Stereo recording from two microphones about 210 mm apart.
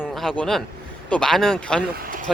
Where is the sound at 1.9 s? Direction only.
45° right (ahead or behind).